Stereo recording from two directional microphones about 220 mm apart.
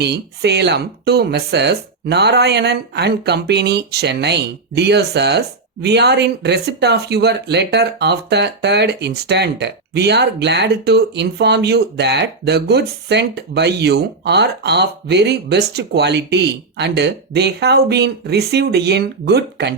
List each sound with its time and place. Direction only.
0.0 s speech: 50° right (ahead or behind)